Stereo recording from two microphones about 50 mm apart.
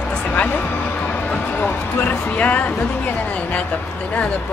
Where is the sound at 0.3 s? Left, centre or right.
Left.